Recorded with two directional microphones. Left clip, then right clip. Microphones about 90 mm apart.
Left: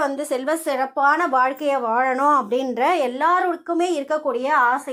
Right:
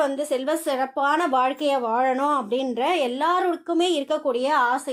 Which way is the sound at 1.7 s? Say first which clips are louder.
Left 2 dB; 5° right (ahead or behind).